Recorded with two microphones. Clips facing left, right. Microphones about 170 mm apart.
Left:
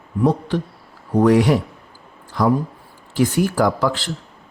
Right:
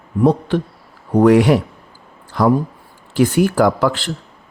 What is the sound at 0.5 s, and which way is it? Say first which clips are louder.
Speech: right 4 dB; 65° right (ahead or behind).